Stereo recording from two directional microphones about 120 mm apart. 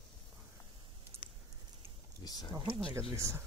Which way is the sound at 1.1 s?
55° right (ahead or behind).